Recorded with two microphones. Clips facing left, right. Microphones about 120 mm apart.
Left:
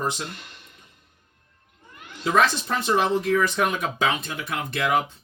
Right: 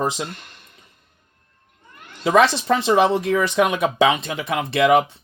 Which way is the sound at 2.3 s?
90° right.